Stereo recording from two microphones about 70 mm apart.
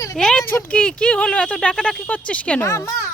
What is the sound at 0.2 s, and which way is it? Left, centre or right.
Speech, centre.